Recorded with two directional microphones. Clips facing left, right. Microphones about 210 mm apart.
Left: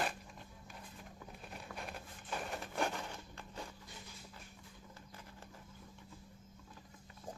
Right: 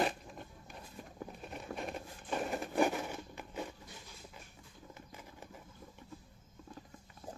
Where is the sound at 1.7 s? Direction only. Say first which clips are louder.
Right 7 dB; centre (ahead or behind).